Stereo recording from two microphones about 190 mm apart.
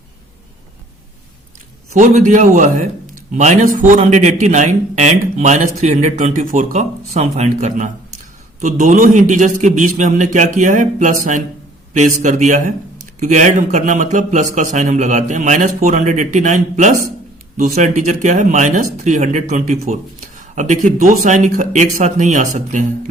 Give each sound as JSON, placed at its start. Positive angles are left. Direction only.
{"t": 1.9, "sound": "speech", "side_deg": -40}